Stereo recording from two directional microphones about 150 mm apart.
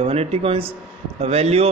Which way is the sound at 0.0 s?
40° right (ahead or behind).